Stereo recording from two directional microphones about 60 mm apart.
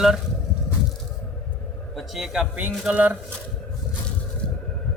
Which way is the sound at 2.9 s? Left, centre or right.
Right.